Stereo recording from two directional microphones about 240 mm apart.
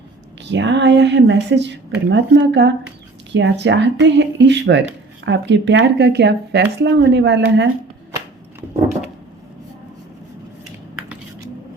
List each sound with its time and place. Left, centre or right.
0.5 s speech: right